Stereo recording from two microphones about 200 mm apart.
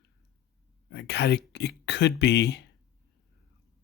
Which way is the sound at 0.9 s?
55° left (ahead or behind).